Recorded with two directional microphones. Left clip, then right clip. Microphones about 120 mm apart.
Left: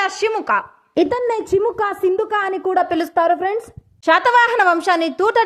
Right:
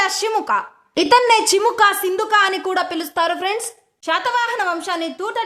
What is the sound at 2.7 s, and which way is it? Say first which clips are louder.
Speech: left 3 dB; 25° left (ahead or behind).